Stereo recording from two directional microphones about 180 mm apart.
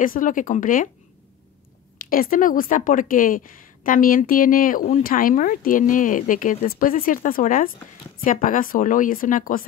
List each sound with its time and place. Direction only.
0.0 s a woman's voice: 50° left (ahead or behind)
2.0 s a woman's voice: 50° left (ahead or behind)